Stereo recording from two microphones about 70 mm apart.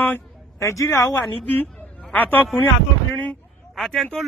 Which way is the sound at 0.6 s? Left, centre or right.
Left.